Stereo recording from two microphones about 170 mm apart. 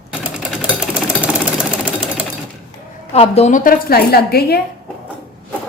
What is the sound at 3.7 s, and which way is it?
Speech, 65° left (ahead or behind).